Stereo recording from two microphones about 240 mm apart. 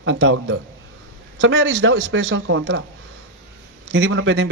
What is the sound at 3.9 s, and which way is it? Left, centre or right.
Speech, right.